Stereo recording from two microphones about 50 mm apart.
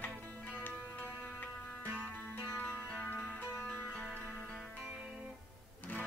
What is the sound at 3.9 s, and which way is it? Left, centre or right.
Music, left.